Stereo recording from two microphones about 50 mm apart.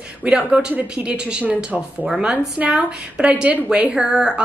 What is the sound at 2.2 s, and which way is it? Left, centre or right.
A woman's voice, right.